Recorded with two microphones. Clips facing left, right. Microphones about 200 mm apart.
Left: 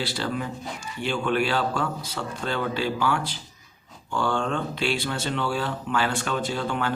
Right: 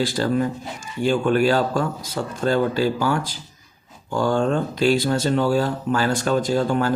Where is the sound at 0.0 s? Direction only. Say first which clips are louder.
Right 8 dB; 45° right (ahead or behind).